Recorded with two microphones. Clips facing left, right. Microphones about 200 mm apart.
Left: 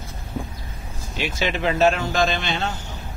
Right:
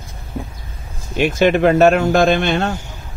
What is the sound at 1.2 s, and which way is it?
Speech, 55° right (ahead or behind).